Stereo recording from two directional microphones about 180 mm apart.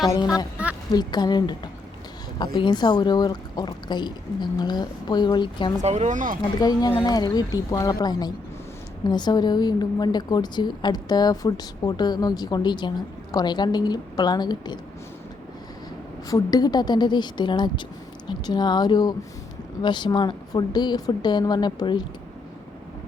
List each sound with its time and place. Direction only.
0.2 s a woman's voice: 20° left (ahead or behind)
5.8 s speech: 40° right (ahead or behind)
6.6 s a woman's voice: 20° left (ahead or behind)
16.3 s a woman's voice: 20° left (ahead or behind)